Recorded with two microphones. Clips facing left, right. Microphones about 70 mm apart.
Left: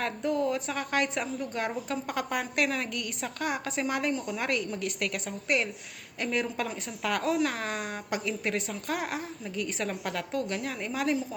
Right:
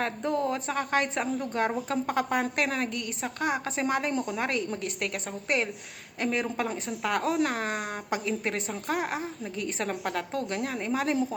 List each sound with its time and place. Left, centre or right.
0.0 s a woman's voice: right